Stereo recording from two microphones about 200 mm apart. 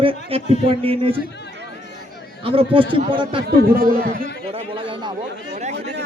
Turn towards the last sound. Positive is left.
turn(degrees=-35)  # may be behind; listen again after turning